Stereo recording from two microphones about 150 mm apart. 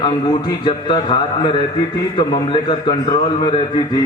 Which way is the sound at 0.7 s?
30° left (ahead or behind).